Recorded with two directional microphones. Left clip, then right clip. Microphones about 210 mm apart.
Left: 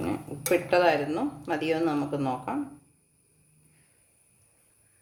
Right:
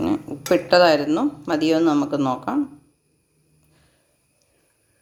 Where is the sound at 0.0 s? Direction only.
35° right (ahead or behind).